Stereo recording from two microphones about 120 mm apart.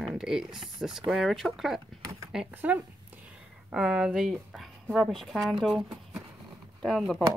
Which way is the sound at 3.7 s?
5° right (ahead or behind).